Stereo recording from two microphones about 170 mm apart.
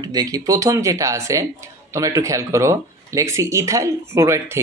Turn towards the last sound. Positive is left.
turn(degrees=-15)  # may be behind; listen again after turning